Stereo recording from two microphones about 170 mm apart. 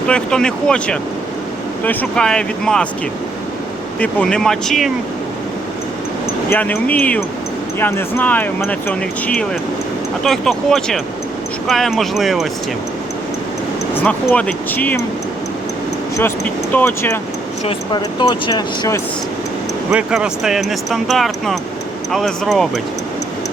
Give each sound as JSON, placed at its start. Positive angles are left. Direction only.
{"t": 0.1, "sound": "speech", "side_deg": 5}
{"t": 4.0, "sound": "speech", "side_deg": 5}
{"t": 6.5, "sound": "speech", "side_deg": 10}
{"t": 13.9, "sound": "speech", "side_deg": 10}
{"t": 16.7, "sound": "speech", "side_deg": 15}
{"t": 17.7, "sound": "speech", "side_deg": 25}
{"t": 19.9, "sound": "speech", "side_deg": -5}